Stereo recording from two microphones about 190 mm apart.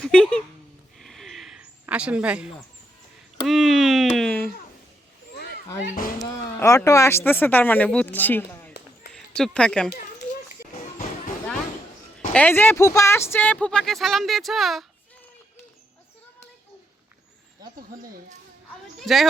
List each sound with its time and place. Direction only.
0.0 s a sound: 5° left (ahead or behind)
6.6 s speech: 15° left (ahead or behind)
12.3 s speech: 10° left (ahead or behind)
18.9 s speech: centre (ahead or behind)